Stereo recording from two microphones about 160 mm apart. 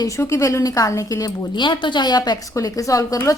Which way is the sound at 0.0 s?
20° left (ahead or behind).